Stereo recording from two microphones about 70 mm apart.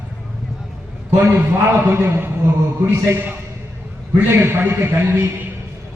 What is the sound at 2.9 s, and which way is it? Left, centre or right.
Speech, right.